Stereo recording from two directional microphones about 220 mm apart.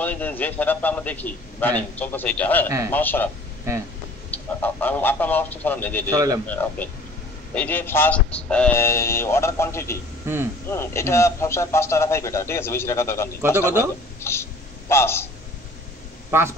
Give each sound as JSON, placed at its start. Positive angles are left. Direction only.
{"t": 0.0, "sound": "a man's voice", "side_deg": 10}
{"t": 4.6, "sound": "a man's voice", "side_deg": 10}
{"t": 6.0, "sound": "a man's voice", "side_deg": -15}
{"t": 6.4, "sound": "a man's voice", "side_deg": 10}
{"t": 10.2, "sound": "speech", "side_deg": -10}
{"t": 10.7, "sound": "a man's voice", "side_deg": 10}
{"t": 16.3, "sound": "speech", "side_deg": -10}